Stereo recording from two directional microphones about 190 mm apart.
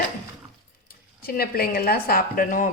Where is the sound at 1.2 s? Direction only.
50° left (ahead or behind).